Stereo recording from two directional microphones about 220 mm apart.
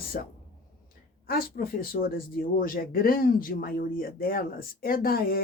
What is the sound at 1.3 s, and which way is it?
Speech, 40° left (ahead or behind).